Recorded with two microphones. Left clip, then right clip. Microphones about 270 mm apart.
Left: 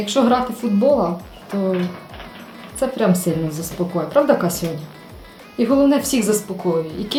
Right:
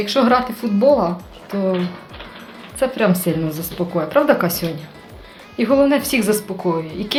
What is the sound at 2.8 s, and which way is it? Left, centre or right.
Speech, centre.